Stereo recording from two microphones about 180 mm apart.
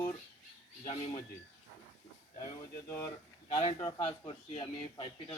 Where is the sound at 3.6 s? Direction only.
30° left (ahead or behind).